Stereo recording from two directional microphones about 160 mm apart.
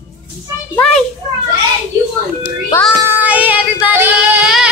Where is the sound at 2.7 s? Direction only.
20° left (ahead or behind).